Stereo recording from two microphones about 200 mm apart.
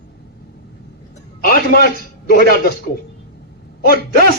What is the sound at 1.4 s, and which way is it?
A man's voice, 50° left (ahead or behind).